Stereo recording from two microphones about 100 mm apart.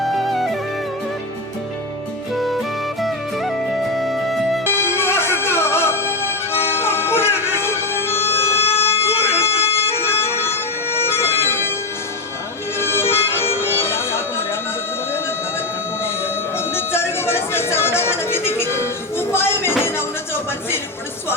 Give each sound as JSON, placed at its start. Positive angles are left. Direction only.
{"t": 0.0, "sound": "music", "side_deg": 0}
{"t": 2.3, "sound": "music", "side_deg": 0}
{"t": 4.6, "sound": "music", "side_deg": 25}
{"t": 8.7, "sound": "a sound", "side_deg": 25}
{"t": 9.5, "sound": "music", "side_deg": 70}
{"t": 10.0, "sound": "music", "side_deg": 25}
{"t": 12.8, "sound": "music", "side_deg": 25}
{"t": 16.0, "sound": "a sound", "side_deg": 25}
{"t": 19.8, "sound": "music", "side_deg": 25}